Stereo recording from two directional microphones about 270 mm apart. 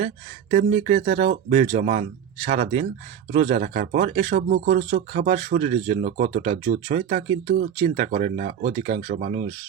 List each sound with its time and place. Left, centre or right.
0.5 s speech: right